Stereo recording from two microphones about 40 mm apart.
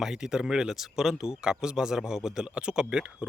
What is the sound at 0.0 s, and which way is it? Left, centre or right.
Speech, centre.